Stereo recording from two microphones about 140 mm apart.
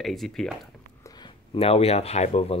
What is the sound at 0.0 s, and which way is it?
Speech, centre (ahead or behind).